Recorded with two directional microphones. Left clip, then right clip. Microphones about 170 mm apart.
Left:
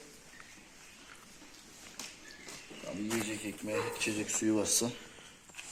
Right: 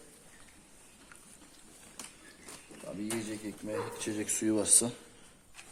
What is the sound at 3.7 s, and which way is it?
Speech, 15° right (ahead or behind).